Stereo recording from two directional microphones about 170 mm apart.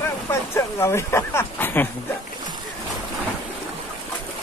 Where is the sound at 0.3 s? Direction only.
15° left (ahead or behind).